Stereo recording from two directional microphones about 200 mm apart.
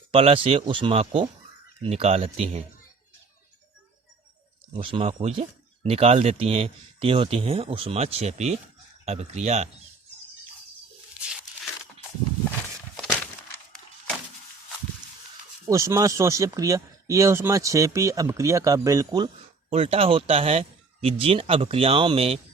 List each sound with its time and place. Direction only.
0.1 s speech: 30° right (ahead or behind)
4.7 s speech: 25° right (ahead or behind)
15.6 s speech: 15° right (ahead or behind)